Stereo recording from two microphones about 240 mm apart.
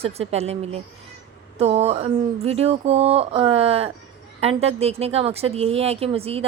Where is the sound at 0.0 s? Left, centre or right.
Right.